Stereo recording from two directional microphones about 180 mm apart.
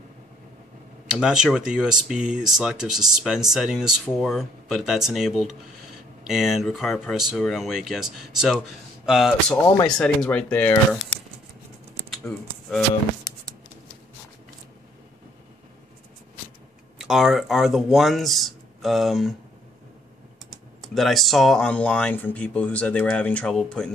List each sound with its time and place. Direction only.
1.1 s speech: 5° right (ahead or behind)
12.1 s typing: centre (ahead or behind)
17.0 s speech: centre (ahead or behind)
20.8 s speech: centre (ahead or behind)